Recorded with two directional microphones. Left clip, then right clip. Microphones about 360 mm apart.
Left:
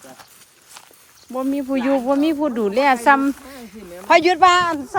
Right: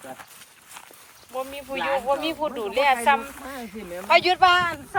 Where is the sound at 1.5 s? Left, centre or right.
Left.